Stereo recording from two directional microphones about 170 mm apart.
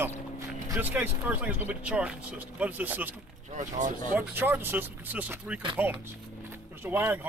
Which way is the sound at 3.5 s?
45° right (ahead or behind).